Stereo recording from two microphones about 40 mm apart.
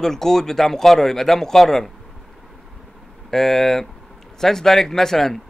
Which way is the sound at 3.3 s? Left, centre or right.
Centre.